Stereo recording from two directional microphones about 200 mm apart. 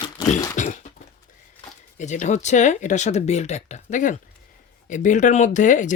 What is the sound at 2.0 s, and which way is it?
Speech, 35° left (ahead or behind).